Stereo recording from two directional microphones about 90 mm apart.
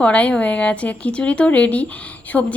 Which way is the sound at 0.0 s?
15° left (ahead or behind).